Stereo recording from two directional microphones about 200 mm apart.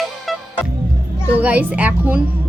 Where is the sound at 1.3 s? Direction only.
5° right (ahead or behind).